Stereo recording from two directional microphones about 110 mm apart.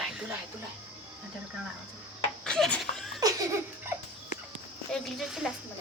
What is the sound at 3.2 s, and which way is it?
Laughter, 35° right (ahead or behind).